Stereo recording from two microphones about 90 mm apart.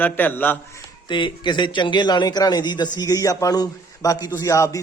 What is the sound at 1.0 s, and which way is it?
A man's voice, 60° left (ahead or behind).